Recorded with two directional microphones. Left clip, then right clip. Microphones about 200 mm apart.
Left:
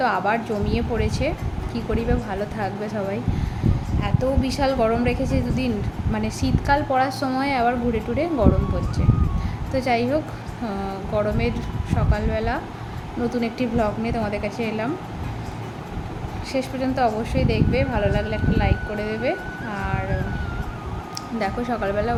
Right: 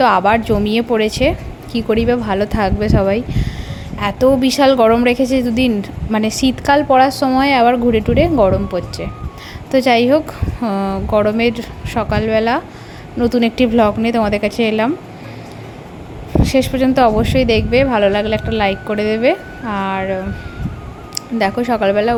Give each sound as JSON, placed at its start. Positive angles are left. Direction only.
{"t": 0.0, "sound": "a woman's voice", "side_deg": -45}
{"t": 16.4, "sound": "a woman's voice", "side_deg": -45}
{"t": 21.2, "sound": "a woman's voice", "side_deg": -40}